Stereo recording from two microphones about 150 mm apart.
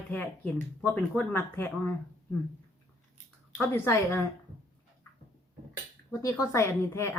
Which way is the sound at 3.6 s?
15° left (ahead or behind).